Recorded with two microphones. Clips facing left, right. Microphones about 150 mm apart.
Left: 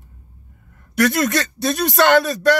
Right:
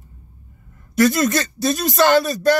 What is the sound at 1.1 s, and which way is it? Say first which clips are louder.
Speech: even; centre (ahead or behind).